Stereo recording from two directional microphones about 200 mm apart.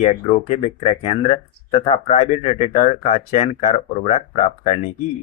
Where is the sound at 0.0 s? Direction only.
30° left (ahead or behind).